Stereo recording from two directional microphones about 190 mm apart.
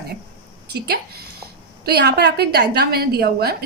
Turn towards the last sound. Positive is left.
turn(degrees=-55)  # may be behind; listen again after turning